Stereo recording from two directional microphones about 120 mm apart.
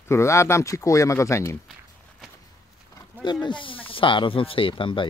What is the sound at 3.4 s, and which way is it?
Speech, 45° left (ahead or behind).